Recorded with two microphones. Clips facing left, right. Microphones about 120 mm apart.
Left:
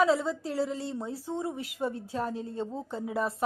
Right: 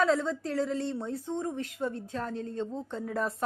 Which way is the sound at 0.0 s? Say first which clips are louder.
Left 1 dB; 5° left (ahead or behind).